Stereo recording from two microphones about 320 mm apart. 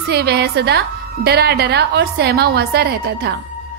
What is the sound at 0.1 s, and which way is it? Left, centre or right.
A woman's voice, right.